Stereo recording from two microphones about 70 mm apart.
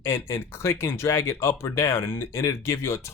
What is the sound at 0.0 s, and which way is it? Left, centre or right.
Speech, left.